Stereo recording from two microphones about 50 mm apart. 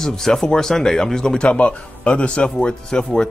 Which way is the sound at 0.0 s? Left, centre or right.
Centre.